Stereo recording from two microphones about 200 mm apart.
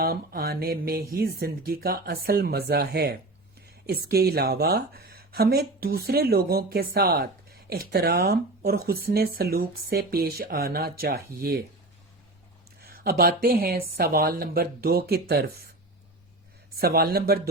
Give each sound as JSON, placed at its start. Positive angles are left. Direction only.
{"t": 0.0, "sound": "speech", "side_deg": -50}
{"t": 12.9, "sound": "speech", "side_deg": -50}
{"t": 16.8, "sound": "speech", "side_deg": -50}